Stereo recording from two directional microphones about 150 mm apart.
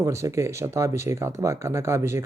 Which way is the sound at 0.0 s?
20° right (ahead or behind).